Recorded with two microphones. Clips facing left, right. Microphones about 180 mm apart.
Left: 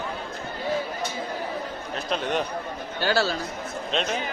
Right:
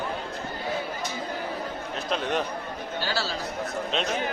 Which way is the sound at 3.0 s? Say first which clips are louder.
Left 7 dB; 55° left (ahead or behind).